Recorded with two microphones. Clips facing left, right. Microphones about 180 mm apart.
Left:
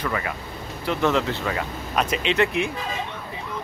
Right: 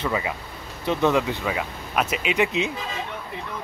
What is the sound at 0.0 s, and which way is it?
Speech, 15° right (ahead or behind).